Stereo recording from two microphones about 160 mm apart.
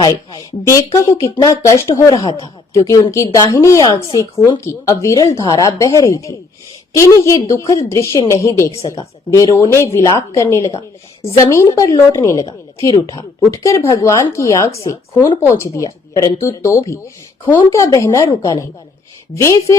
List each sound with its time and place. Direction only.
0.0 s a woman's voice: 25° left (ahead or behind)
10.7 s speech: 35° left (ahead or behind)
11.5 s a woman's voice: 20° left (ahead or behind)